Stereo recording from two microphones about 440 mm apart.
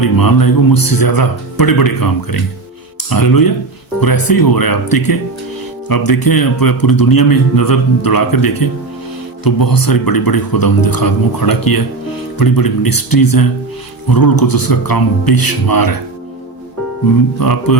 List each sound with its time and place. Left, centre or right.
0.0 s a man's voice: left
3.1 s a man's voice: left
17.4 s a man's voice: left